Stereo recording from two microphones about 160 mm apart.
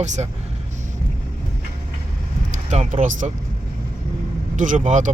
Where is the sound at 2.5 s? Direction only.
50° right (ahead or behind).